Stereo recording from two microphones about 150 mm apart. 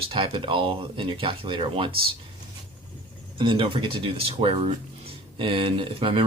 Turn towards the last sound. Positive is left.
turn(degrees=-35)  # may be behind; listen again after turning